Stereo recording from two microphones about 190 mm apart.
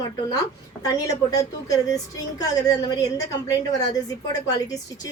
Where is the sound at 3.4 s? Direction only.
20° left (ahead or behind).